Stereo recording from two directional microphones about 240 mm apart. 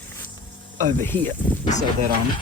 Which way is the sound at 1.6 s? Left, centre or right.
Left.